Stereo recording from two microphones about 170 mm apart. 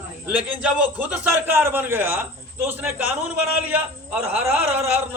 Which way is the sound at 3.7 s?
10° right (ahead or behind).